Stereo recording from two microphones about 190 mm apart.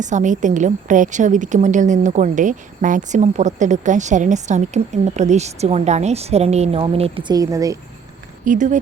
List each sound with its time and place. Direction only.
0.0 s a woman's voice: 40° right (ahead or behind); by 7.8 s 15° right (ahead or behind)
8.4 s a woman's voice: 40° right (ahead or behind)